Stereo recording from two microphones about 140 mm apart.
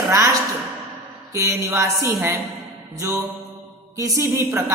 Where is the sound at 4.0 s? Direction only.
25° right (ahead or behind).